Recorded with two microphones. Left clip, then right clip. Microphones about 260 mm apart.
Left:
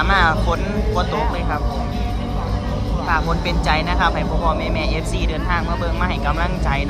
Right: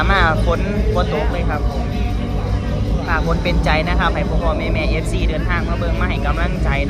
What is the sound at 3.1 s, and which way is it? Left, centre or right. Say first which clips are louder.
Speech: even; centre.